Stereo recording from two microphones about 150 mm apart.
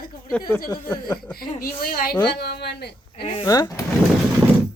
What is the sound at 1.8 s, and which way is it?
Speech, 80° left.